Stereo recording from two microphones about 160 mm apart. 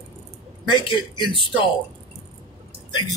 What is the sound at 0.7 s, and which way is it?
Speech, 30° left (ahead or behind).